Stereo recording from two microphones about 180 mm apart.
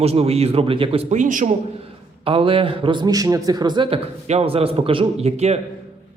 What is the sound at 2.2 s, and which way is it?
A man's voice, 30° right (ahead or behind).